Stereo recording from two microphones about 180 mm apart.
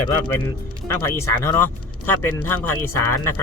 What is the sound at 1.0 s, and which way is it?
Speech, 15° left (ahead or behind).